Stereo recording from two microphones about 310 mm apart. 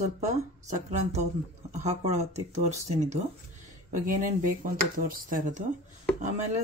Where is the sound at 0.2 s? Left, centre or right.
Right.